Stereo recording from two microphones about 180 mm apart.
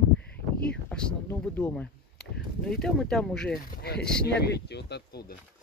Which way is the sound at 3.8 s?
60° left (ahead or behind).